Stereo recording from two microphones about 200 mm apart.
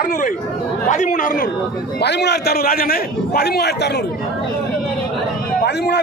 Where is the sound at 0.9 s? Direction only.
35° left (ahead or behind).